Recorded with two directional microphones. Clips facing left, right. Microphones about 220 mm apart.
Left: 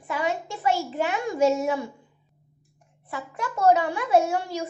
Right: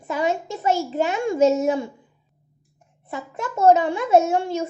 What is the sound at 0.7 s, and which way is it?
A child's voice, 20° right (ahead or behind).